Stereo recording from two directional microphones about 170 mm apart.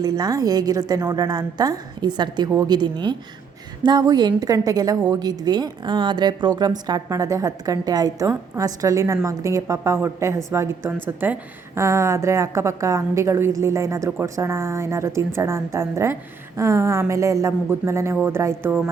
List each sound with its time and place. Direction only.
0.0 s a woman's voice: 20° right (ahead or behind)